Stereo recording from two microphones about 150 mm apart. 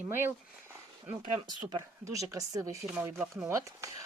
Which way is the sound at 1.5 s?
25° right (ahead or behind).